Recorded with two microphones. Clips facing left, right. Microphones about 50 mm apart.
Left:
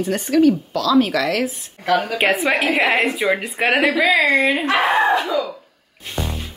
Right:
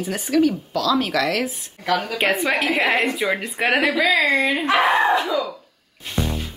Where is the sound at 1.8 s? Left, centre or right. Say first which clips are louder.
Left 3 dB; centre.